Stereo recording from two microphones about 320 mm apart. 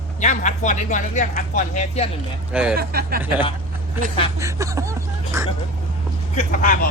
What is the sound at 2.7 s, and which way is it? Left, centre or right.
Speech, right.